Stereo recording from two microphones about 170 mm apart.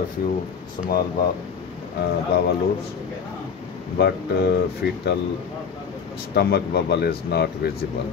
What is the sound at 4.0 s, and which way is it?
Speech, 75° left (ahead or behind).